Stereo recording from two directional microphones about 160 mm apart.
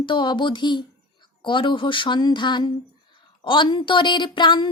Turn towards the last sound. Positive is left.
turn(degrees=30)  # may be behind; listen again after turning